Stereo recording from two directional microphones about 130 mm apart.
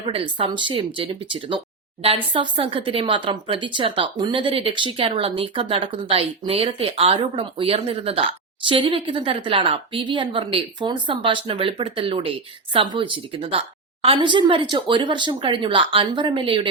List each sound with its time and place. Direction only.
0.1 s a woman's voice: 45° right (ahead or behind)